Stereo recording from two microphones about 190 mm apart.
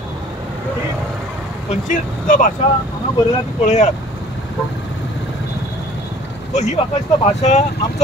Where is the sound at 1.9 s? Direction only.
45° left (ahead or behind).